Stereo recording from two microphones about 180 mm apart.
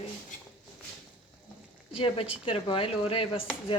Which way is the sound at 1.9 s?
30° left (ahead or behind).